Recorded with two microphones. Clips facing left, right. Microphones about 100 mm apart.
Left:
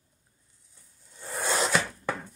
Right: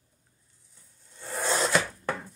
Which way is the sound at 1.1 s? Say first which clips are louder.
Right 1 dB; 5° left (ahead or behind).